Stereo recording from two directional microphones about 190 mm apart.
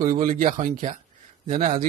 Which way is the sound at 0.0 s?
45° right (ahead or behind).